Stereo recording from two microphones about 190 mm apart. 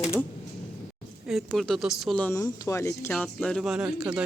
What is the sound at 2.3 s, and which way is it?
Speech, 15° left (ahead or behind).